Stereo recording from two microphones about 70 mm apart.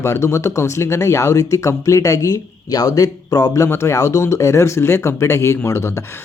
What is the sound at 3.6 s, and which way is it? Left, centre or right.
Speech, left.